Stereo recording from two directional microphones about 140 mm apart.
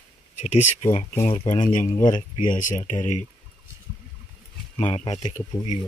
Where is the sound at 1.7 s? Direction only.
60° left (ahead or behind).